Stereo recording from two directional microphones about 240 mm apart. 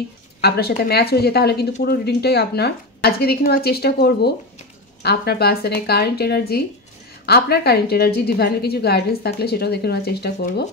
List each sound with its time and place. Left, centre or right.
0.4 s a woman's voice: left